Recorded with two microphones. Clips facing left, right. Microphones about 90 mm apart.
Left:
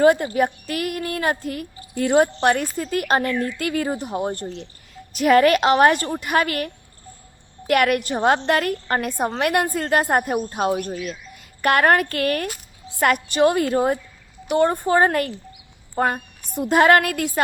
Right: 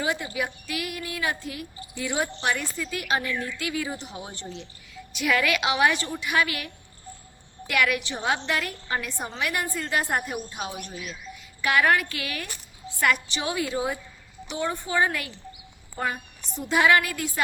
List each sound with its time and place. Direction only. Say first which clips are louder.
0.0 s a woman's voice: left 12 dB; 50° left (ahead or behind)
7.7 s a woman's voice: left 7 dB; 50° left (ahead or behind)